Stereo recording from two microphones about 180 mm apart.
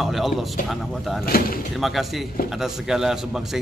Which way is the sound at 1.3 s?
60° left (ahead or behind).